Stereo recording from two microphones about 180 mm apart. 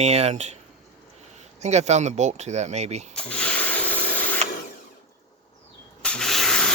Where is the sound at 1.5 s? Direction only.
40° right (ahead or behind).